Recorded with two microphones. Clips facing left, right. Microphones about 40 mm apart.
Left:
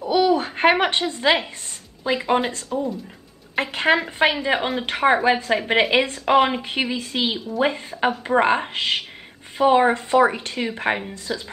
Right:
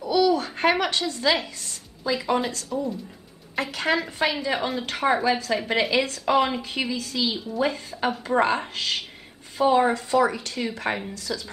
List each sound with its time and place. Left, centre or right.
0.0 s babbling: left
2.1 s speech: left